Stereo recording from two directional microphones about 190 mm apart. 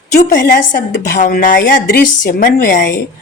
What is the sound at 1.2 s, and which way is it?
A woman's voice, 45° left (ahead or behind).